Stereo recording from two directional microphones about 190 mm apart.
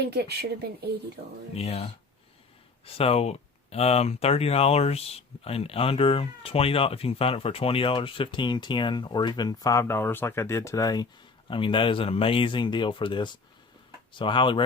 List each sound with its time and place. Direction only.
0.1 s speech: 60° right (ahead or behind)
1.5 s speech: 35° left (ahead or behind)